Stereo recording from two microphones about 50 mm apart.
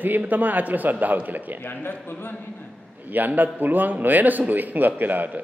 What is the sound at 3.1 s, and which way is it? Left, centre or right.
A man's voice, right.